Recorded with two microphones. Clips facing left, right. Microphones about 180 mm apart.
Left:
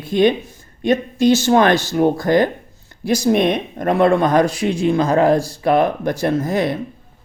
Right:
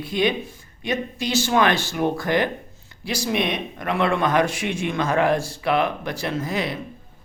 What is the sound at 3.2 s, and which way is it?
A man's voice, 50° left (ahead or behind).